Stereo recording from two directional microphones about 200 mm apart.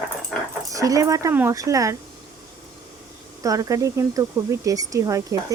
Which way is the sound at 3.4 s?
15° right (ahead or behind).